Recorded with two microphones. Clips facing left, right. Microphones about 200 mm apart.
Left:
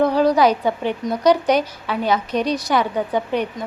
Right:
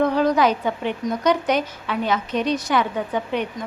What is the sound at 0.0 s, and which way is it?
A woman's voice, 35° left (ahead or behind).